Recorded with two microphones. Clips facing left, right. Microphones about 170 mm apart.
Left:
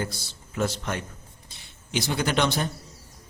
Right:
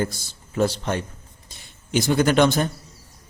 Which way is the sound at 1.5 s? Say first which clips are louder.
Right 6 dB; 50° right (ahead or behind).